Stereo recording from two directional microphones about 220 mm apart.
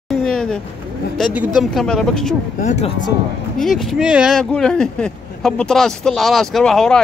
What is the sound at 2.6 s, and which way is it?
Speech, 30° left (ahead or behind).